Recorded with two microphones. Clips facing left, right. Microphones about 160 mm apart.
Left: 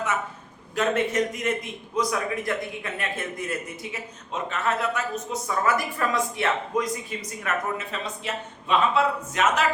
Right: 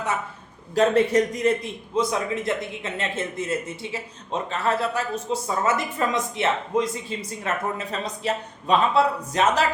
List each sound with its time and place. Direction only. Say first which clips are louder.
0.8 s a man's voice: right 5 dB; 35° right (ahead or behind)